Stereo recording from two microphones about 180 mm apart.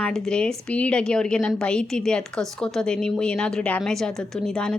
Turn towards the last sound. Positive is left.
turn(degrees=5)  # may be behind; listen again after turning